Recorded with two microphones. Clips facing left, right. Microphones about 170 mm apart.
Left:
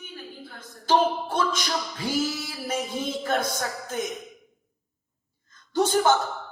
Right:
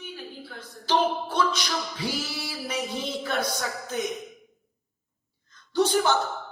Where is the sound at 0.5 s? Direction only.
50° left (ahead or behind).